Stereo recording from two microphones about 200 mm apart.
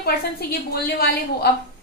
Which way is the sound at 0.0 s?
50° left (ahead or behind).